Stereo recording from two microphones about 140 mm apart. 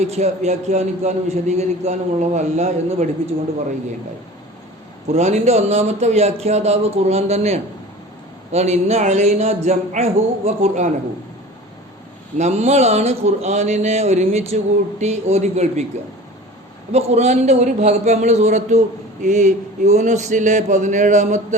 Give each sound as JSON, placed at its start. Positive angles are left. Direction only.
{"t": 0.0, "sound": "speech", "side_deg": -50}
{"t": 5.0, "sound": "speech", "side_deg": -50}
{"t": 12.4, "sound": "speech", "side_deg": -55}
{"t": 16.9, "sound": "a man's voice", "side_deg": -50}